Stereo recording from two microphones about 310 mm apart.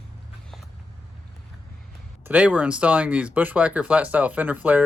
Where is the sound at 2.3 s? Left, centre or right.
Centre.